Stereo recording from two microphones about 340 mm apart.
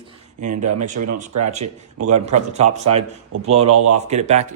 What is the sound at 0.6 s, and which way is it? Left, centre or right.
Speech, right.